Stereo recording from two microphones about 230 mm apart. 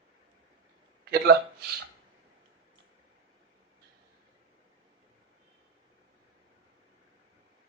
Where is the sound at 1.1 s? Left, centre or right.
Right.